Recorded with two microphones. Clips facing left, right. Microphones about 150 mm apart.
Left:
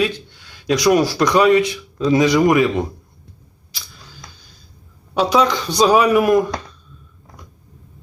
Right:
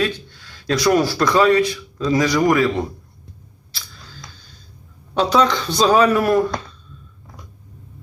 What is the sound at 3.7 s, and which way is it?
Camera, 15° left (ahead or behind).